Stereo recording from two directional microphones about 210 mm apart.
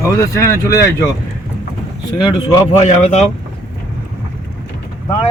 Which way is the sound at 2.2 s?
20° left (ahead or behind).